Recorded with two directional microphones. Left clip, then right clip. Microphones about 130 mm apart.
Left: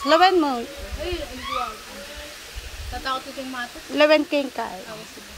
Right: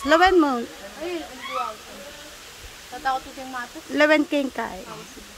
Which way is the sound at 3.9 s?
45° right (ahead or behind).